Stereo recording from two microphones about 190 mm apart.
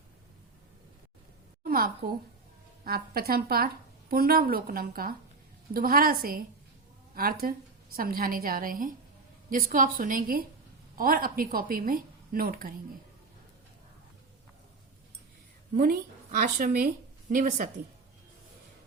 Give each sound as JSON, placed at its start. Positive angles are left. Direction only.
{"t": 1.6, "sound": "a sound", "side_deg": -50}
{"t": 2.8, "sound": "a woman's voice", "side_deg": -55}
{"t": 15.7, "sound": "a woman's voice", "side_deg": -45}